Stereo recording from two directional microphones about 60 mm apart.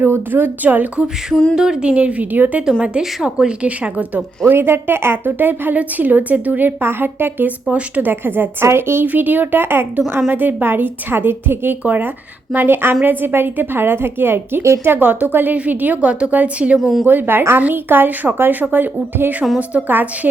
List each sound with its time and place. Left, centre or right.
0.0 s a woman's voice: right
1.5 s speech: centre; by 2.6 s right
3.2 s speech: centre
4.5 s a woman's voice: right
8.1 s a woman's voice: right
9.0 s a woman's voice: right
11.8 s speech: right
12.5 s a woman's voice: right
14.9 s a woman's voice: right
16.8 s speech: centre
17.1 s a woman's voice: right